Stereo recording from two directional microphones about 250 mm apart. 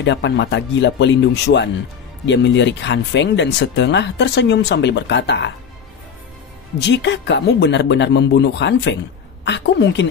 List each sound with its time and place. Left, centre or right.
0.0 s speech: left
6.9 s speech: left